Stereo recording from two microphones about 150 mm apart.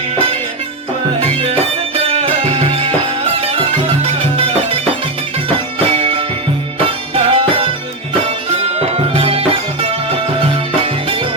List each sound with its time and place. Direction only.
1.2 s music: 40° right (ahead or behind)
5.8 s music: 40° right (ahead or behind)
9.1 s music: 40° right (ahead or behind)